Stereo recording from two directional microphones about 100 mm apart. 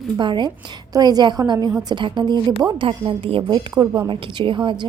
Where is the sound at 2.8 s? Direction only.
65° right (ahead or behind).